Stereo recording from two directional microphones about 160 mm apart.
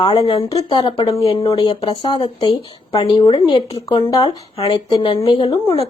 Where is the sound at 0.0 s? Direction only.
25° left (ahead or behind).